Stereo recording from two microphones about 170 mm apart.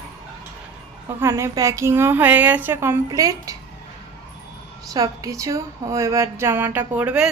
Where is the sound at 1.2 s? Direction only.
15° right (ahead or behind).